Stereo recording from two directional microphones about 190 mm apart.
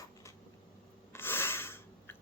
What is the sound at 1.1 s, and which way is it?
Filing, 10° left (ahead or behind).